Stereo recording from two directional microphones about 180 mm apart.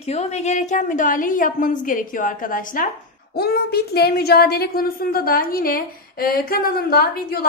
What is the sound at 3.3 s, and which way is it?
A woman's voice, 60° left (ahead or behind).